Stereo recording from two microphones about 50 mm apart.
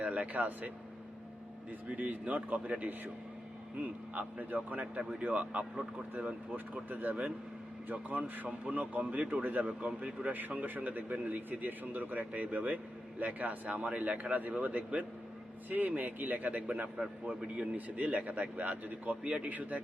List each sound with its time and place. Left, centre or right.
0.0 s speech: right
2.0 s speech: right
4.1 s speech: right